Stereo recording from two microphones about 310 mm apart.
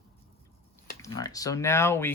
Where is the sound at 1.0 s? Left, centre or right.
Centre.